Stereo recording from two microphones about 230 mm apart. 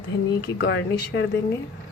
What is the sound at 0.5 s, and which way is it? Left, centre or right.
Speech, left.